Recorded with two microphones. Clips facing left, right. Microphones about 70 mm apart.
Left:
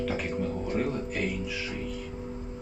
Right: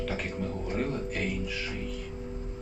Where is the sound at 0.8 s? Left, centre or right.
Centre.